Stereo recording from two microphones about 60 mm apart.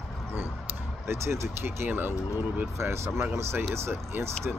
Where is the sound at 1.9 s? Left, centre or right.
Right.